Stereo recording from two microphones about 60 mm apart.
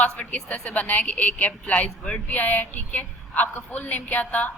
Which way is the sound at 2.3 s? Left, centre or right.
Left.